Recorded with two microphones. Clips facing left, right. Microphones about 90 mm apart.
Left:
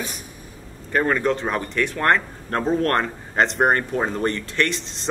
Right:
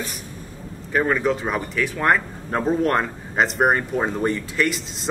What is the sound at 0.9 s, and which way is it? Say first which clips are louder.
Speech: even; 5° right (ahead or behind).